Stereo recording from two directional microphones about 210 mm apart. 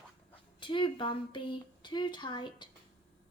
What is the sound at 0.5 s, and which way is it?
A woman's voice, 25° left (ahead or behind).